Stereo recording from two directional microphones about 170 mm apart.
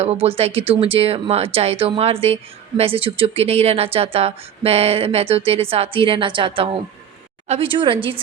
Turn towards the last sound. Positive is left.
turn(degrees=-30)  # may be behind; listen again after turning